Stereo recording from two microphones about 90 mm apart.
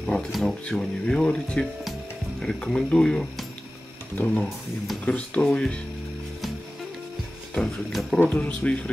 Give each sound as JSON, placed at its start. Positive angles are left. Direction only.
{"t": 0.0, "sound": "speech", "side_deg": 5}
{"t": 5.0, "sound": "speech", "side_deg": 15}
{"t": 7.5, "sound": "speech", "side_deg": 5}